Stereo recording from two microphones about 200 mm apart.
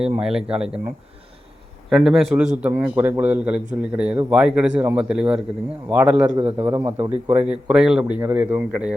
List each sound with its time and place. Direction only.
0.0 s a man's voice: 5° right (ahead or behind)
1.9 s a man's voice: centre (ahead or behind)
6.2 s a man's voice: 20° right (ahead or behind)
7.4 s a man's voice: 5° right (ahead or behind)